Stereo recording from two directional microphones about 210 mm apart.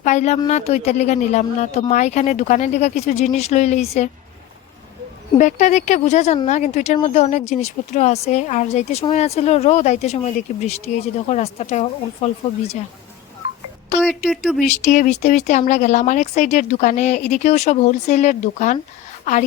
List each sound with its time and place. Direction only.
0.0 s speech: 35° left (ahead or behind)
5.4 s speech: 35° left (ahead or behind)
14.3 s speech: centre (ahead or behind)
14.6 s a woman's voice: 35° left (ahead or behind)